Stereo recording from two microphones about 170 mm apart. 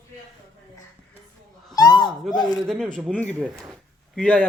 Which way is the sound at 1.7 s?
25° left (ahead or behind).